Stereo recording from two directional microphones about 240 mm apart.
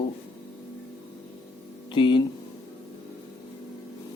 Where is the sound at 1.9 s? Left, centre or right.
Centre.